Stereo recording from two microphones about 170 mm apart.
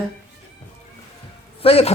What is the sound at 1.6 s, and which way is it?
Speech, 35° left (ahead or behind).